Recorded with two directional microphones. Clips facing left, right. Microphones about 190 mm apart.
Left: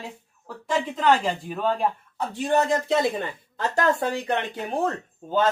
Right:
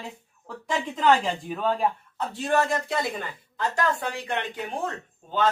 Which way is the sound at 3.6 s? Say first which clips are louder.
Left 3 dB; 45° left (ahead or behind).